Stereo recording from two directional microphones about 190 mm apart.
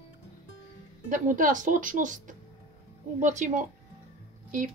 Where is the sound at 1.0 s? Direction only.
45° right (ahead or behind).